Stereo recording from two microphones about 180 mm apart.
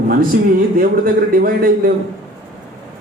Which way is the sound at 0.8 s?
55° right (ahead or behind).